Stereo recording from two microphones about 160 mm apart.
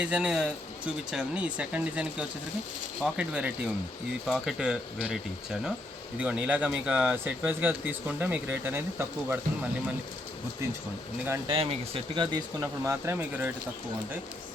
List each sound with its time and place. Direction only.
0.0 s speech: 5° right (ahead or behind)
11.4 s speech: 35° right (ahead or behind); by 13.5 s 10° right (ahead or behind)